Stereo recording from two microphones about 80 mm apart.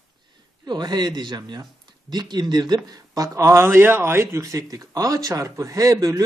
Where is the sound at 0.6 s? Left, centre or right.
Right.